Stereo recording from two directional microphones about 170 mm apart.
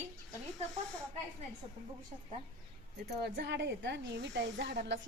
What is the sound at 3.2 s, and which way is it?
Speech, 85° right.